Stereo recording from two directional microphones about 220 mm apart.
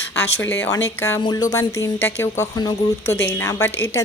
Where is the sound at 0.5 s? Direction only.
10° left (ahead or behind).